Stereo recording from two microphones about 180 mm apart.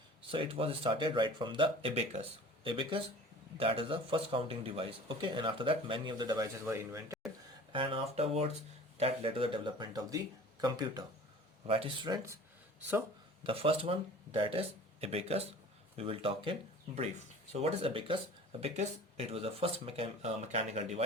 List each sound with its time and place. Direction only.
0.2 s speech: 30° right (ahead or behind)
7.7 s speech: 30° right (ahead or behind)
13.4 s speech: 30° right (ahead or behind)
19.3 s speech: 35° right (ahead or behind)